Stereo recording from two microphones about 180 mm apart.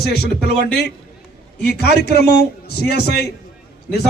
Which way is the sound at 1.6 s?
65° left (ahead or behind).